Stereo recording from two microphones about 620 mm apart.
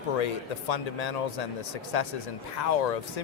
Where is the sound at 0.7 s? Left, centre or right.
Left.